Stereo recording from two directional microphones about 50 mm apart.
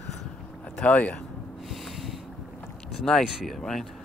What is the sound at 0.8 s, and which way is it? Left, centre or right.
Speech, left.